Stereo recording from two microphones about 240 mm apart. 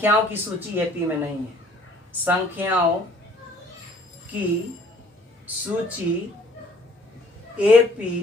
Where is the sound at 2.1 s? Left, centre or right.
Centre.